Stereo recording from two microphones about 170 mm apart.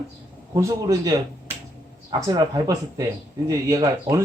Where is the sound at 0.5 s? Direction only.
20° right (ahead or behind).